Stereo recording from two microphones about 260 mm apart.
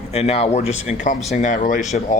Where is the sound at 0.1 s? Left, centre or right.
Left.